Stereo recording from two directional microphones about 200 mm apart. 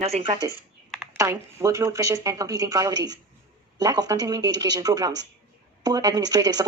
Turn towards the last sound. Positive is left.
turn(degrees=-20)  # may be behind; listen again after turning